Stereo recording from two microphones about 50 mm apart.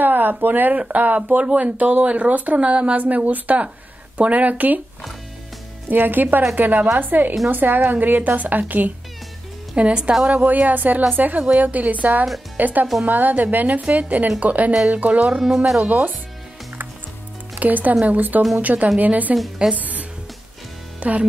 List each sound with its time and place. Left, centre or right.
0.0 s speech: right
5.9 s speech: right
9.8 s speech: right
15.4 s speech: centre
15.8 s speech: right
17.6 s speech: right
19.3 s speech: centre
19.7 s speech: right